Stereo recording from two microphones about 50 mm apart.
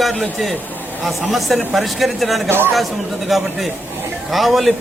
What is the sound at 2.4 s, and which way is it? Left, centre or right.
Speech, right.